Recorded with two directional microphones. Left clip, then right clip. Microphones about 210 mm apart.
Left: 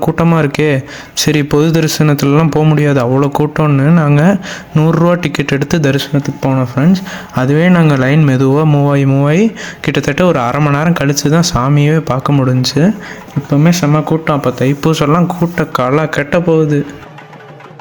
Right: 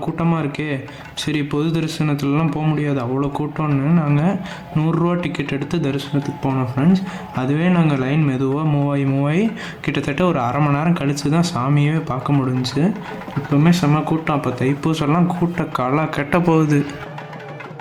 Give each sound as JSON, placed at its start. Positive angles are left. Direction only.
{"t": 0.0, "sound": "speech", "side_deg": 35}